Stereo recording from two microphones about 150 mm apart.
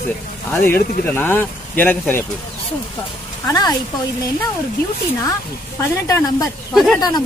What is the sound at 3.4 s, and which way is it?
Speech, 25° left (ahead or behind).